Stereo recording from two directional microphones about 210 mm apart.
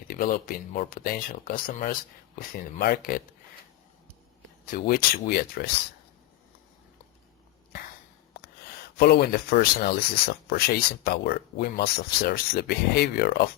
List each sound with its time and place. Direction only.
0.1 s speech: 40° left (ahead or behind)
4.6 s speech: 40° left (ahead or behind)
9.0 s speech: 50° left (ahead or behind)